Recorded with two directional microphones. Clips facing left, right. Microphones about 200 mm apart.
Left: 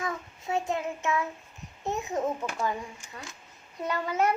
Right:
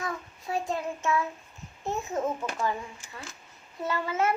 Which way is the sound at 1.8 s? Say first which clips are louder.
Even; 20° left (ahead or behind).